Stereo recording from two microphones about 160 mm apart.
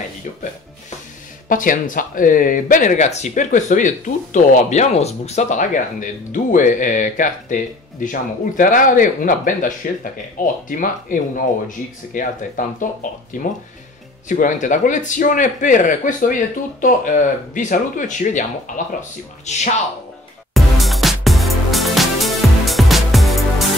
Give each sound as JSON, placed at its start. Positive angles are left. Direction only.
{"t": 1.5, "sound": "speech", "side_deg": 55}
{"t": 20.5, "sound": "music", "side_deg": 0}